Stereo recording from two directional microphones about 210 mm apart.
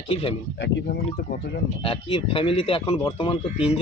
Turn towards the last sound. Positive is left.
turn(degrees=25)  # may be behind; listen again after turning